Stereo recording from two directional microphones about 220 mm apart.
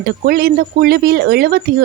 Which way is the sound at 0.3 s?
45° right (ahead or behind).